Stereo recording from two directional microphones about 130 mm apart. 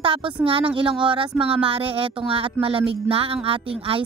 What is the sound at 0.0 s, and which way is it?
Music, 45° right (ahead or behind).